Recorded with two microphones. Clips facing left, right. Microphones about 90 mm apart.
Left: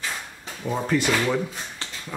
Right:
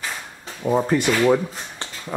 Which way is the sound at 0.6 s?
25° right (ahead or behind).